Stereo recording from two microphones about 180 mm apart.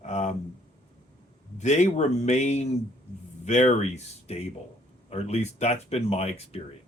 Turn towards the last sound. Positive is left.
turn(degrees=35)  # may be behind; listen again after turning